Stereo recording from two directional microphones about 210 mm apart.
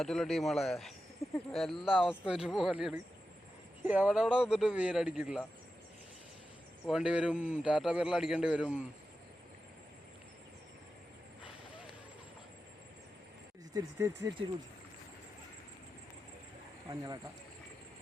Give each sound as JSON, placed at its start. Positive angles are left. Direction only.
{"t": 0.0, "sound": "speech", "side_deg": 0}
{"t": 1.2, "sound": "a sound", "side_deg": 0}
{"t": 1.5, "sound": "speech", "side_deg": 0}
{"t": 6.8, "sound": "speech", "side_deg": -5}
{"t": 13.7, "sound": "speech", "side_deg": -15}